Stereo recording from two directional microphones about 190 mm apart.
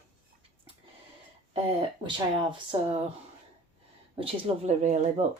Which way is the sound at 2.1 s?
25° right (ahead or behind).